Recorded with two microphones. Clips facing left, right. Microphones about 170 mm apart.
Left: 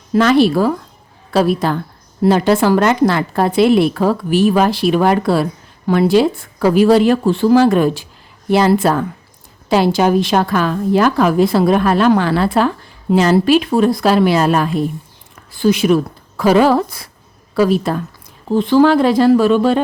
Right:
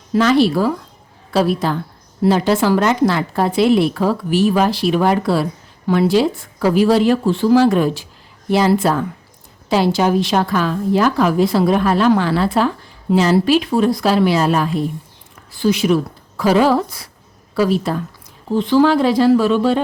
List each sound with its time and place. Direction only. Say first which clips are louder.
0.1 s a woman's voice: left 2 dB; 55° left (ahead or behind)